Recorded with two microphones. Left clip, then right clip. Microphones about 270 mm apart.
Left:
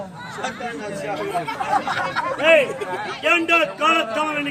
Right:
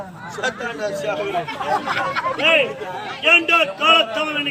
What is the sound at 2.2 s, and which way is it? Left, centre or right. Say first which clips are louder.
A man's voice: left 2 dB; centre.